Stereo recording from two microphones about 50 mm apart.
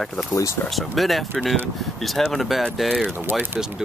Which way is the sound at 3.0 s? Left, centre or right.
Right.